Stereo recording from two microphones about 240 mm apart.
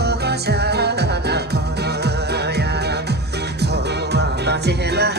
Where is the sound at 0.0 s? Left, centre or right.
Right.